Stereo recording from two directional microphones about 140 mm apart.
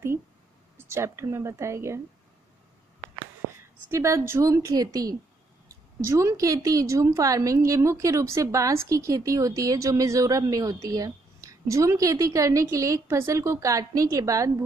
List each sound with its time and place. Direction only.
0.7 s a woman's voice: 20° right (ahead or behind)
3.9 s a woman's voice: 20° right (ahead or behind)